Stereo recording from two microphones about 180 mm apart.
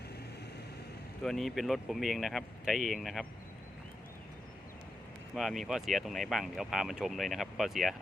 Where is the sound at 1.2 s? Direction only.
Centre (ahead or behind).